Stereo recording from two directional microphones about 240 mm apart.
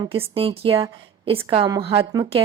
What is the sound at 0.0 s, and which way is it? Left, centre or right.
Speech, centre.